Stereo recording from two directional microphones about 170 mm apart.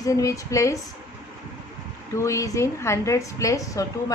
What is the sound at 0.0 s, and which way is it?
Speech, 20° left (ahead or behind).